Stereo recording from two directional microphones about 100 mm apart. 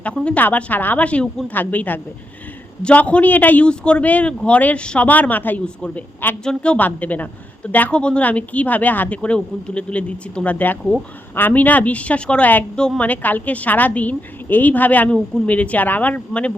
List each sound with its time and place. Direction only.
0.3 s a woman's voice: 15° left (ahead or behind)